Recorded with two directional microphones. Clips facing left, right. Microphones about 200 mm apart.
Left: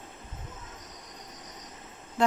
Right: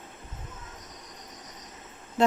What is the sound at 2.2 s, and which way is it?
Vehicle, 25° right (ahead or behind).